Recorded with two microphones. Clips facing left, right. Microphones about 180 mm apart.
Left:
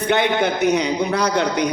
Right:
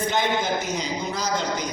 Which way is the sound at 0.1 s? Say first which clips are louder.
Left 8 dB; 65° left (ahead or behind).